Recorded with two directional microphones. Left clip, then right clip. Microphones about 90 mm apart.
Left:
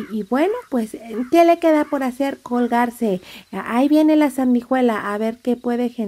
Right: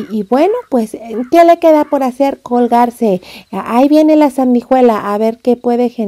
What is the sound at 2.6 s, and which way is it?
A woman's voice, 30° right (ahead or behind).